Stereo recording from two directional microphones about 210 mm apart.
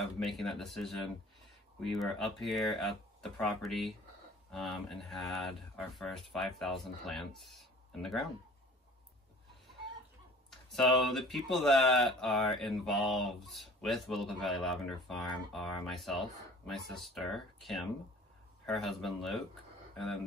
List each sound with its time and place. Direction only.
0.0 s speech: centre (ahead or behind)
10.7 s speech: centre (ahead or behind)